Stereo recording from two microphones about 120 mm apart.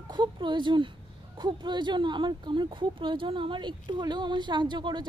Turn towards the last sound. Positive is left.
turn(degrees=-40)  # may be behind; listen again after turning